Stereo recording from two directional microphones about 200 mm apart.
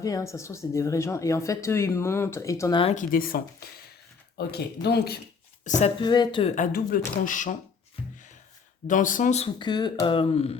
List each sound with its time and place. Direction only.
0.0 s speech: 15° left (ahead or behind)
2.8 s speech: 40° left (ahead or behind); by 5.2 s 55° left (ahead or behind)
5.6 s speech: 35° left (ahead or behind)
6.0 s speech: 20° left (ahead or behind)
6.6 s speech: 45° left (ahead or behind)
8.9 s speech: 40° left (ahead or behind)
9.6 s speech: 20° left (ahead or behind)